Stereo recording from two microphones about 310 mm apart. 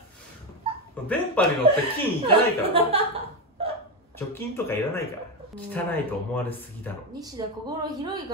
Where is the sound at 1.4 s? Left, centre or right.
Centre.